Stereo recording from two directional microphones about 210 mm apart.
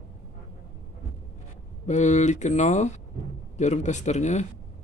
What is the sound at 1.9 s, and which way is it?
Speech, 35° left (ahead or behind).